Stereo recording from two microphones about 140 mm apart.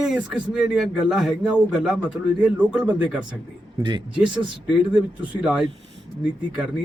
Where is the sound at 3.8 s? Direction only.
30° right (ahead or behind).